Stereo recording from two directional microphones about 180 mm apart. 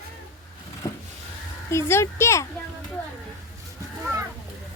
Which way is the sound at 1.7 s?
15° left (ahead or behind).